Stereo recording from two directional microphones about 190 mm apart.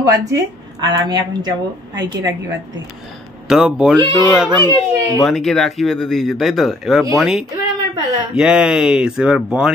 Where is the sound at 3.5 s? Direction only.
5° right (ahead or behind).